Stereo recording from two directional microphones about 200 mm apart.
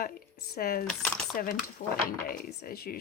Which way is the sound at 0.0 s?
50° left (ahead or behind).